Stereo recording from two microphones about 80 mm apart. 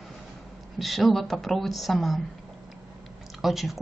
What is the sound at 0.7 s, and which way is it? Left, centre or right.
A woman's voice, centre.